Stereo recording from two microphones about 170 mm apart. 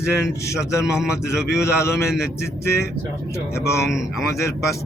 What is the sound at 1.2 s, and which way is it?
Speech, 15° left (ahead or behind).